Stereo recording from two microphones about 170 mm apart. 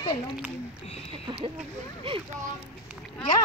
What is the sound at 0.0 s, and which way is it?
Speech, 25° left (ahead or behind).